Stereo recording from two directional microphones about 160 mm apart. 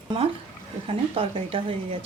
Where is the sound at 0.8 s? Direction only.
35° right (ahead or behind).